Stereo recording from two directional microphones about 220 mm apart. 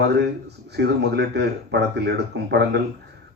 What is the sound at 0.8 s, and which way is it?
A man's voice, 50° right (ahead or behind).